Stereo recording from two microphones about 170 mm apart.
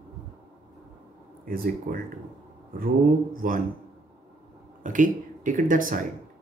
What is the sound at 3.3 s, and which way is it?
Speech, 55° right (ahead or behind).